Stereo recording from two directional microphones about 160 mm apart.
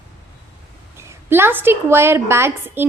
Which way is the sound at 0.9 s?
15° right (ahead or behind).